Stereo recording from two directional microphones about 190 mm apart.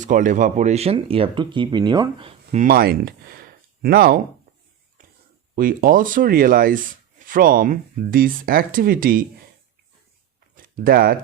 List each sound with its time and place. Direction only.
0.0 s speech: 40° right (ahead or behind); by 2.6 s 25° right (ahead or behind)
2.6 s speech: 50° right (ahead or behind)
5.5 s speech: 50° right (ahead or behind)
10.5 s a sound: 50° right (ahead or behind)